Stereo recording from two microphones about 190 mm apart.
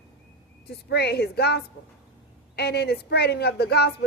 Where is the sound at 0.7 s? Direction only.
60° left (ahead or behind).